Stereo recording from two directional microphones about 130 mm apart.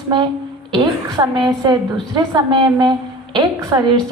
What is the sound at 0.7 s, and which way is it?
A woman's voice, 30° right (ahead or behind).